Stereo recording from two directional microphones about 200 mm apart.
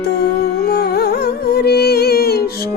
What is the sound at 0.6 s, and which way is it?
Music, 50° left (ahead or behind).